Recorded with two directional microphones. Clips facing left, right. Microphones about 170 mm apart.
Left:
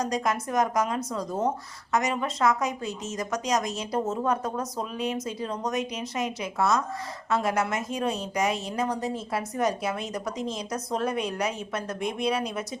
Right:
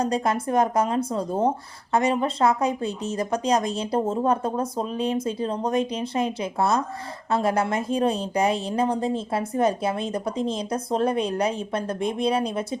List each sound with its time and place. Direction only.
0.0 s a woman's voice: 30° right (ahead or behind)